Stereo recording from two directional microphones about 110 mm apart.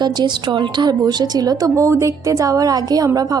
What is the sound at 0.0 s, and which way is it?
A woman's voice, 40° right (ahead or behind).